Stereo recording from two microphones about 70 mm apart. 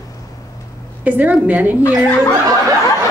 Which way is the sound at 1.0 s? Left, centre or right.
Right.